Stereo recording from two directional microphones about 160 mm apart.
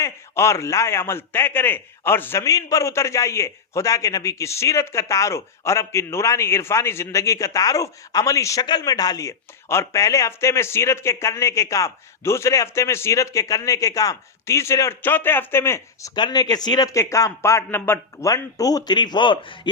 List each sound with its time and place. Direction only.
0.0 s a man's voice: 15° left (ahead or behind)